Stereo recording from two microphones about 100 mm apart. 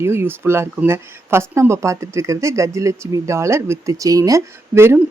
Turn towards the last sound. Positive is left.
turn(degrees=-25)  # may be behind; listen again after turning